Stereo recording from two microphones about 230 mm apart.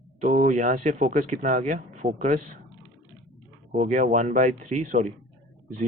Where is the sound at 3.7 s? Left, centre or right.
Right.